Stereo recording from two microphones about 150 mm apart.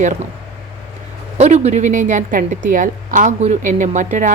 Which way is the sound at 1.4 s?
50° right (ahead or behind).